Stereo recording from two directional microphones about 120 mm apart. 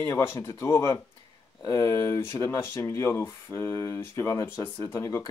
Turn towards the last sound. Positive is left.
turn(degrees=25)  # may be behind; listen again after turning